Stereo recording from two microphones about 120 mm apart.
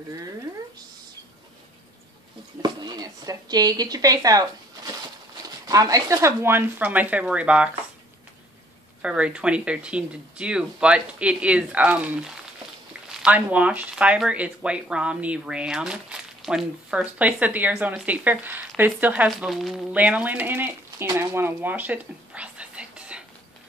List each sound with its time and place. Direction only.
2.6 s a woman's voice: 35° right (ahead or behind); by 7.7 s 10° right (ahead or behind)
9.0 s speech: 10° right (ahead or behind)
19.2 s speech: centre (ahead or behind); by 21.1 s 20° right (ahead or behind)
21.2 s whispering: 20° right (ahead or behind)